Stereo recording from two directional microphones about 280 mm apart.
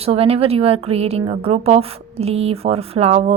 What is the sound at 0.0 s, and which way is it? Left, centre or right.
Speech, right.